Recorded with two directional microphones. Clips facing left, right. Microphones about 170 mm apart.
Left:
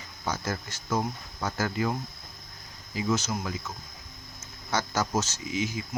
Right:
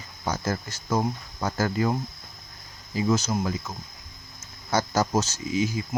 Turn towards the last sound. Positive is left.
turn(degrees=-35)  # may be behind; listen again after turning